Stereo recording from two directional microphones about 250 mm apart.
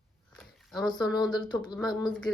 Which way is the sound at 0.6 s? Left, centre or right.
Centre.